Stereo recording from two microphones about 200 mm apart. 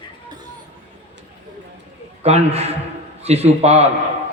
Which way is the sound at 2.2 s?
30° right (ahead or behind).